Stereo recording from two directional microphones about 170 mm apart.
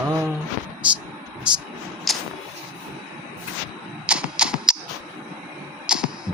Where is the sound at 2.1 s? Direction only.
Centre (ahead or behind).